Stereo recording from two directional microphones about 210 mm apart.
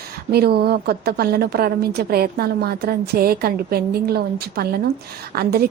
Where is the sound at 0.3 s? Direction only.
50° right (ahead or behind).